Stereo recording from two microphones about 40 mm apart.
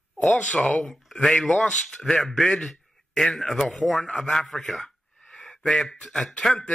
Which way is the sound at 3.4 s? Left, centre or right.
Centre.